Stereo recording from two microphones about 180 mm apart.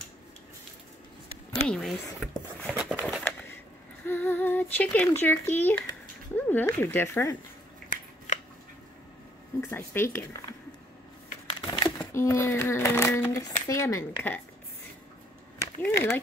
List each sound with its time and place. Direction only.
1.5 s speech: centre (ahead or behind)
2.7 s a sound: 5° right (ahead or behind)
4.0 s a child's voice: 10° left (ahead or behind)
9.6 s a child's voice: 10° left (ahead or behind)
11.6 s a sound: 25° left (ahead or behind)
12.1 s a child's voice: 15° left (ahead or behind)
15.8 s a child's voice: 15° left (ahead or behind)